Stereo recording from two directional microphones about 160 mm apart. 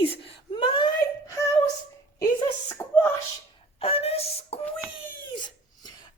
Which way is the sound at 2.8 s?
20° left (ahead or behind).